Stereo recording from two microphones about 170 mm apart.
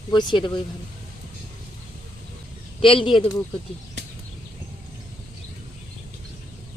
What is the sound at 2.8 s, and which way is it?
Speech, 30° left (ahead or behind).